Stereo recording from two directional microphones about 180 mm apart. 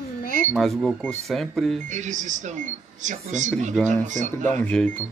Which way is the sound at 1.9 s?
40° right (ahead or behind).